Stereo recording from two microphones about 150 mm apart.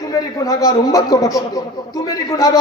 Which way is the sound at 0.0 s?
25° left (ahead or behind).